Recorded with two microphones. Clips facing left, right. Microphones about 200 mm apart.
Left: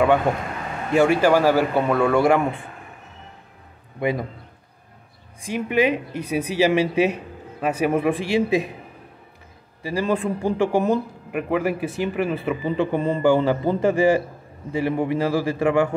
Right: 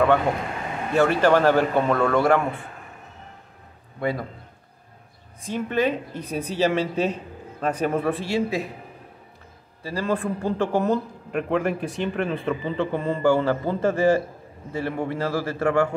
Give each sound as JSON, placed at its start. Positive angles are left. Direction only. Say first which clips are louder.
{"t": 0.9, "sound": "speech", "louder": "left 2 dB", "side_deg": 10}
{"t": 4.0, "sound": "speech", "louder": "left 3 dB", "side_deg": 15}
{"t": 5.4, "sound": "speech", "louder": "left 3 dB", "side_deg": 10}
{"t": 9.8, "sound": "speech", "louder": "left 3 dB", "side_deg": 15}